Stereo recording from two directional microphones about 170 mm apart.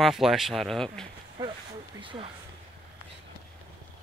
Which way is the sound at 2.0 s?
30° right (ahead or behind).